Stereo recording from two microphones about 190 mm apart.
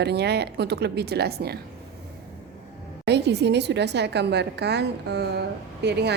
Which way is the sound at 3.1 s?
60° right (ahead or behind).